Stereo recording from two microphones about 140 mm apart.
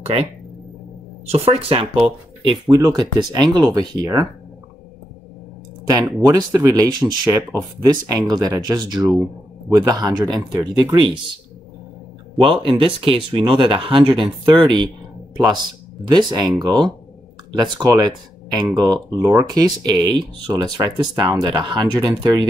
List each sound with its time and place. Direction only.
0.0 s speech: 45° right (ahead or behind)
1.3 s speech: 45° right (ahead or behind)
2.7 s speech: 25° right (ahead or behind)
5.9 s speech: 25° right (ahead or behind)
12.4 s speech: 40° right (ahead or behind)